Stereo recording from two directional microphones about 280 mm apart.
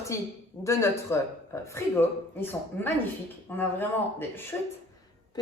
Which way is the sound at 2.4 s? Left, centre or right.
Centre.